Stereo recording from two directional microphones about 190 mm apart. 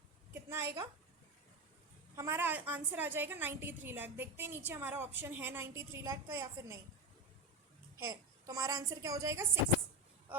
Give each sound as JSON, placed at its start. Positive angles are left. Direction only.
{"t": 0.3, "sound": "a sound", "side_deg": -15}
{"t": 2.1, "sound": "a woman's voice", "side_deg": -15}
{"t": 7.9, "sound": "a woman's voice", "side_deg": -15}